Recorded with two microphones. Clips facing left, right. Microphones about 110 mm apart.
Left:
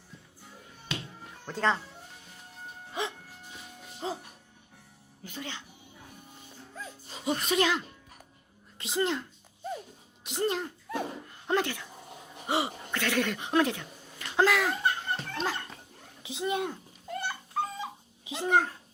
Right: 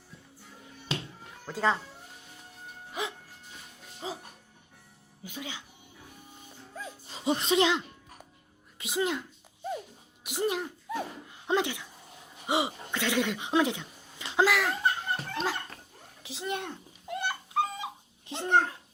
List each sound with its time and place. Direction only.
1.5 s speech: 5° right (ahead or behind)
4.0 s a child's voice: centre (ahead or behind)
5.2 s speech: 10° right (ahead or behind)
7.3 s speech: 25° right (ahead or behind)
8.8 s a child's voice: 5° right (ahead or behind)
10.2 s a sound: 10° right (ahead or behind)
11.4 s speech: 15° right (ahead or behind)
14.4 s a sound: centre (ahead or behind)
15.1 s music: 10° right (ahead or behind)
16.2 s a child's voice: centre (ahead or behind)
17.1 s dog: 15° right (ahead or behind)
18.3 s a child's voice: centre (ahead or behind)